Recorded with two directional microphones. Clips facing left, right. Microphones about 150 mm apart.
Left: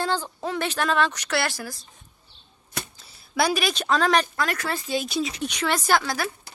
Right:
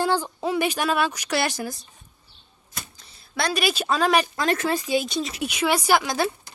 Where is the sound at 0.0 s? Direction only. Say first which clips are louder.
Right 3 dB; 10° right (ahead or behind).